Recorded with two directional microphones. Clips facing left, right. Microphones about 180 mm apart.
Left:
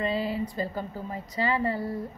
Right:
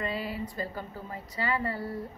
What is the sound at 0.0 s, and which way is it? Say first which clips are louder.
A woman's voice: left 5 dB; 25° left (ahead or behind).